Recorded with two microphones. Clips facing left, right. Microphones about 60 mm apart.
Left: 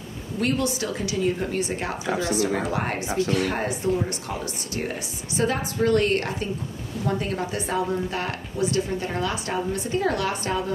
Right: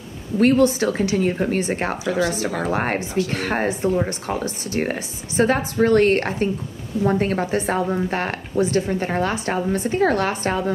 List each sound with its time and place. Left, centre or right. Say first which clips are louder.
0.4 s a woman's voice: right 9 dB; right
4.7 s a woman's voice: right 6 dB; right